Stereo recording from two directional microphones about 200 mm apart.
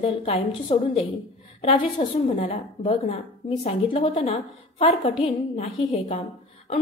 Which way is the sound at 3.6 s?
30° left (ahead or behind).